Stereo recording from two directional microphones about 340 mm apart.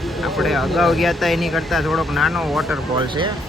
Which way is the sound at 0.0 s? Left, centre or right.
Centre.